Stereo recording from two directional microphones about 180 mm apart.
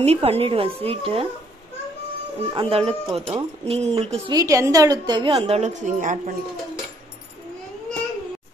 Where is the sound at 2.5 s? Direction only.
30° right (ahead or behind).